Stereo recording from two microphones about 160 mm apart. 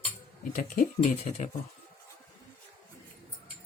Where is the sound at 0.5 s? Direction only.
50° left (ahead or behind).